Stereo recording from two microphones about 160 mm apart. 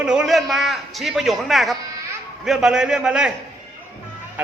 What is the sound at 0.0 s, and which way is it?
A man's voice, 5° right (ahead or behind).